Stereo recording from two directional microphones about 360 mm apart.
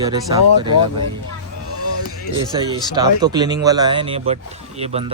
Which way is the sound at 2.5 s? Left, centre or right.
Centre.